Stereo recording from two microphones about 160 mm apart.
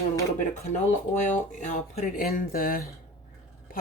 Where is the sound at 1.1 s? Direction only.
50° left (ahead or behind).